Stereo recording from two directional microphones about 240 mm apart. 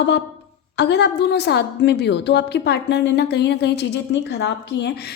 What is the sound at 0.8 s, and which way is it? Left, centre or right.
A woman's voice, left.